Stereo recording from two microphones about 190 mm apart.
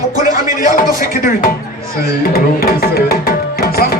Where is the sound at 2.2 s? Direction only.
50° left (ahead or behind).